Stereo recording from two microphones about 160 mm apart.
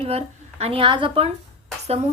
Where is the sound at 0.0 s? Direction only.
40° right (ahead or behind).